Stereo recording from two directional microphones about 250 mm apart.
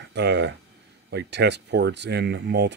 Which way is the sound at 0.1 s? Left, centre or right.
Right.